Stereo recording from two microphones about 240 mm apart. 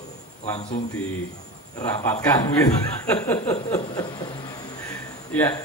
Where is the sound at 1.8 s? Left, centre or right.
Centre.